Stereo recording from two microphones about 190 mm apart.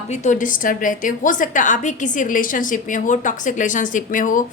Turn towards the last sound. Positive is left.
turn(degrees=45)  # may be behind; listen again after turning